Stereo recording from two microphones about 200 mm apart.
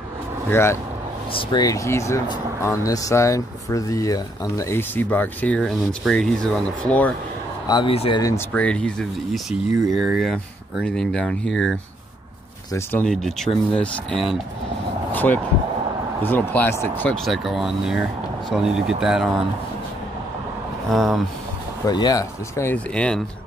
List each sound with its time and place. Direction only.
0.5 s speech: 10° left (ahead or behind)
7.6 s a man's voice: 25° left (ahead or behind)
8.5 s speech: 5° left (ahead or behind)
12.7 s speech: 5° left (ahead or behind)
20.9 s speech: centre (ahead or behind)
21.8 s speech: 20° left (ahead or behind)